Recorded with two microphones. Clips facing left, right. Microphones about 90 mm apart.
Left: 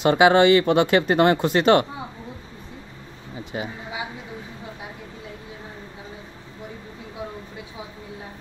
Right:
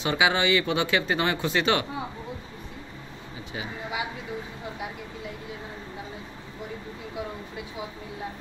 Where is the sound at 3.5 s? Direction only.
35° left (ahead or behind).